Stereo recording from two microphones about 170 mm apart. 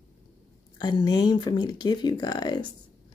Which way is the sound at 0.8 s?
25° left (ahead or behind).